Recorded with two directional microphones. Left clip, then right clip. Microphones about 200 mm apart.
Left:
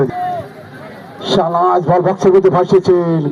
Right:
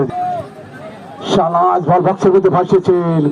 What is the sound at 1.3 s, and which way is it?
A man's voice, 35° left (ahead or behind).